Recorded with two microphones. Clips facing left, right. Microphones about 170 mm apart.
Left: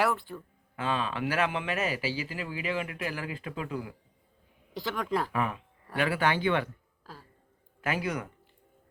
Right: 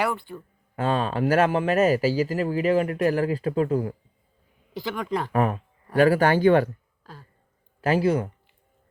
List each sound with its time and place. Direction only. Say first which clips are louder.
0.0 s speech: right 2 dB; centre (ahead or behind)
0.8 s speech: right 7 dB; 45° right (ahead or behind)
4.7 s speech: right 3 dB; centre (ahead or behind)
5.3 s speech: right 8 dB; 40° right (ahead or behind)
7.0 s a sound: right 1 dB; 5° left (ahead or behind)
7.8 s speech: right 10 dB; 30° right (ahead or behind)